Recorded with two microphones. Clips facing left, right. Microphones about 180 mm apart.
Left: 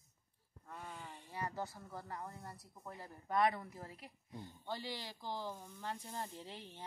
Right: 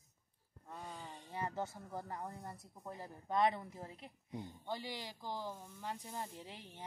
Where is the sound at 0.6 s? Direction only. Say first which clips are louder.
Right 1 dB; 35° right (ahead or behind).